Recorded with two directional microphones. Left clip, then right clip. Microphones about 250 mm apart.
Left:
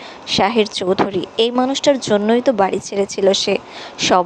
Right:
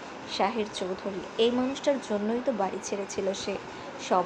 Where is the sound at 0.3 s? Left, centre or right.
Left.